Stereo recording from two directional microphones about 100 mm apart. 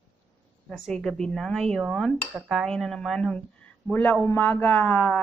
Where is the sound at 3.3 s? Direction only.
15° left (ahead or behind).